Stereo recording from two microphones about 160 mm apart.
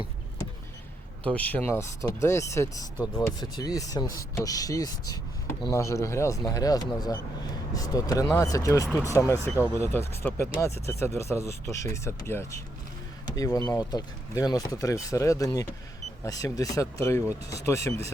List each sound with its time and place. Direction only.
1.3 s speech: 10° left (ahead or behind)